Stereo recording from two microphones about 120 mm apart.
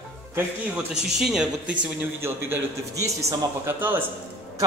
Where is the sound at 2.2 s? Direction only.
20° right (ahead or behind).